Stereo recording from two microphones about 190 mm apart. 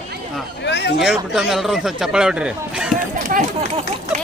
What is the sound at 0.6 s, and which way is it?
Speech, 65° left (ahead or behind).